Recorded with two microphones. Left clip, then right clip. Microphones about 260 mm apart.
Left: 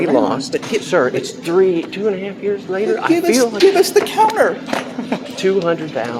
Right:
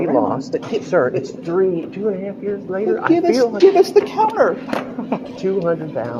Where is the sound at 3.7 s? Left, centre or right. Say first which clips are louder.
Even; left.